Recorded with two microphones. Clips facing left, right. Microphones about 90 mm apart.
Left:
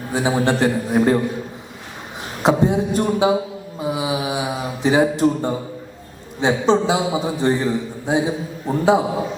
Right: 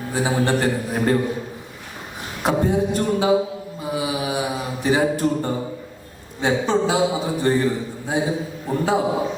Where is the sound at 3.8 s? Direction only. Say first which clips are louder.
Left 3 dB; 20° left (ahead or behind).